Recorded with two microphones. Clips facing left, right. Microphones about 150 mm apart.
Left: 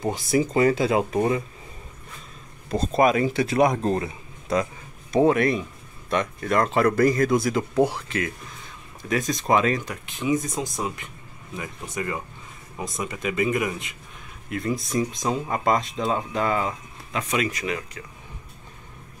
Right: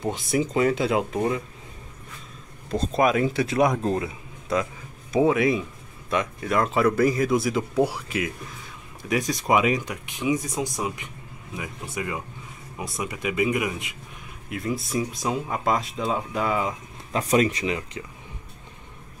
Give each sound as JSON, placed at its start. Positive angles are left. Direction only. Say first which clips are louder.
{"t": 0.0, "sound": "speech", "louder": "left 2 dB", "side_deg": 0}
{"t": 2.7, "sound": "speech", "louder": "left 2 dB", "side_deg": 0}
{"t": 17.1, "sound": "speech", "louder": "right 5 dB", "side_deg": -35}